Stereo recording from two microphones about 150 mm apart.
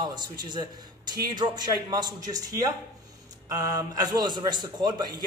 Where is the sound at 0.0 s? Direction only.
30° right (ahead or behind).